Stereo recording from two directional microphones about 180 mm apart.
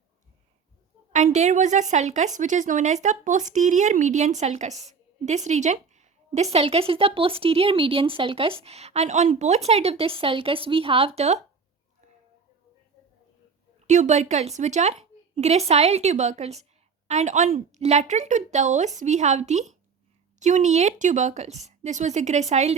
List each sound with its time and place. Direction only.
1.1 s a woman's voice: 40° right (ahead or behind)
13.8 s a woman's voice: 40° right (ahead or behind)